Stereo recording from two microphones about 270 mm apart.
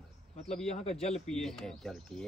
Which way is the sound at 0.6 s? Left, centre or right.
Left.